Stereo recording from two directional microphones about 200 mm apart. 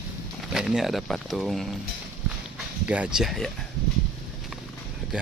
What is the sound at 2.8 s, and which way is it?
Speech, 5° right (ahead or behind).